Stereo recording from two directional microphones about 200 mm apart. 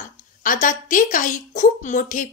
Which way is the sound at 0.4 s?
40° left (ahead or behind).